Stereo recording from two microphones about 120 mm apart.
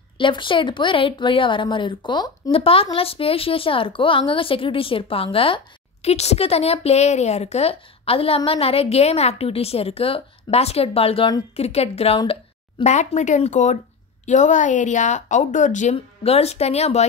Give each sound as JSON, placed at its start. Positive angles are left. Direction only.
{"t": 0.2, "sound": "speech", "side_deg": 45}
{"t": 2.5, "sound": "speech", "side_deg": 50}
{"t": 6.0, "sound": "a woman's voice", "side_deg": 60}
{"t": 12.8, "sound": "speech", "side_deg": 75}